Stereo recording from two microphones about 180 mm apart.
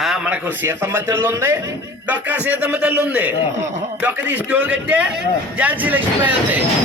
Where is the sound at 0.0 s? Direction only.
5° right (ahead or behind).